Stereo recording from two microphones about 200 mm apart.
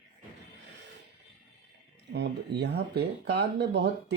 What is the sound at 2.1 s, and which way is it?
Speech, 55° right (ahead or behind).